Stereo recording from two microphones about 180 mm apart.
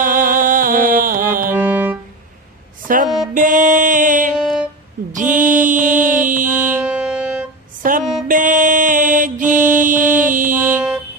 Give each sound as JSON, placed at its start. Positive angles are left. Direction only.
{"t": 0.0, "sound": "music", "side_deg": -50}
{"t": 1.5, "sound": "music", "side_deg": -10}
{"t": 2.8, "sound": "a sound", "side_deg": -50}
{"t": 3.3, "sound": "music", "side_deg": -45}
{"t": 6.5, "sound": "music", "side_deg": -10}
{"t": 7.8, "sound": "music", "side_deg": -50}
{"t": 8.3, "sound": "mantra", "side_deg": -45}
{"t": 10.6, "sound": "a sound", "side_deg": -10}